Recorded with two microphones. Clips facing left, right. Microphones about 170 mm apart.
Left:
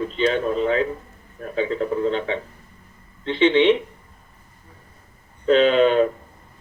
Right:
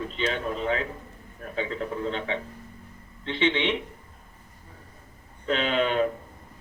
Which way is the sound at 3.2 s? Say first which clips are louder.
Left 9 dB; 40° left (ahead or behind).